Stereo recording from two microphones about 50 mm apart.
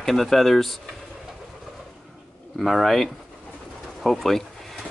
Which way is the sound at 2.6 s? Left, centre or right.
Centre.